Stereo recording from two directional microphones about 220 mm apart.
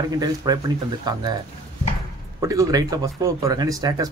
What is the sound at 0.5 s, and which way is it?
Speech, 15° right (ahead or behind).